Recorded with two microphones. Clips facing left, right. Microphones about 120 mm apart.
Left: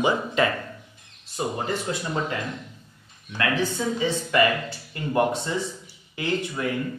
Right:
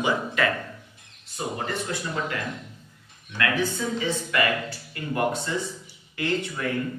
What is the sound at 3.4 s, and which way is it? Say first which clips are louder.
A man's voice: left 1 dB; 25° left (ahead or behind).